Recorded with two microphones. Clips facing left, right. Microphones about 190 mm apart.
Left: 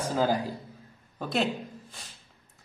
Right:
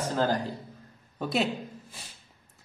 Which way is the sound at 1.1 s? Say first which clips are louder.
Even; centre (ahead or behind).